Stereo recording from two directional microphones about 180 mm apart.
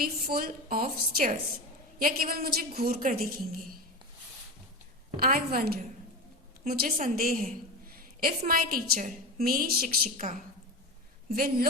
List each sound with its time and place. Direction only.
0.0 s a woman's voice: 55° right (ahead or behind)
5.1 s a woman's voice: 55° right (ahead or behind)
11.3 s a woman's voice: 55° right (ahead or behind)